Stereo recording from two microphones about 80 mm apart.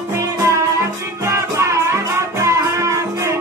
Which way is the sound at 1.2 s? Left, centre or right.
Right.